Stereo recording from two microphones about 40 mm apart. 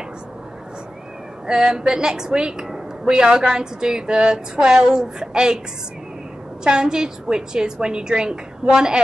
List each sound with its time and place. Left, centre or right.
1.5 s a woman's voice: centre
6.6 s a woman's voice: centre